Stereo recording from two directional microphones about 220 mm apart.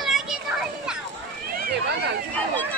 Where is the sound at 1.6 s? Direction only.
45° right (ahead or behind).